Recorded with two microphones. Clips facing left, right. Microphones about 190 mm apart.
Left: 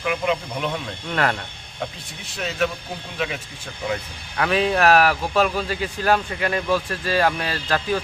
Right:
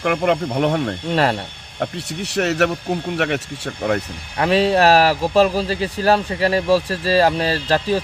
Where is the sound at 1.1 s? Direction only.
30° right (ahead or behind).